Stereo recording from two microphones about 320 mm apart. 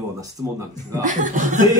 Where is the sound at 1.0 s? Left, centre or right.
Right.